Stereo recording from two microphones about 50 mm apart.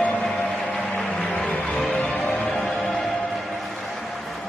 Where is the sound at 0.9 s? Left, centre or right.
Centre.